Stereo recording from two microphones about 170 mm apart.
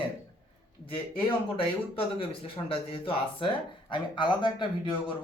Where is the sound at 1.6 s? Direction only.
30° left (ahead or behind).